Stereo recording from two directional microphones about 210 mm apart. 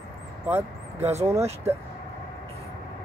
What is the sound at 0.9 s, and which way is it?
Speech, 30° right (ahead or behind).